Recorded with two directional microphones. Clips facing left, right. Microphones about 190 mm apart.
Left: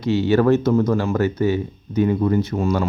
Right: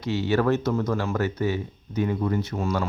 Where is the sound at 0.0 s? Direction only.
25° left (ahead or behind).